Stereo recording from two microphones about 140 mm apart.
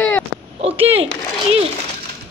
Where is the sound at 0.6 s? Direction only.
45° right (ahead or behind).